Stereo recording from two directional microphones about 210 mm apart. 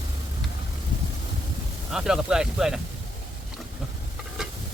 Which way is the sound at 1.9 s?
Centre (ahead or behind).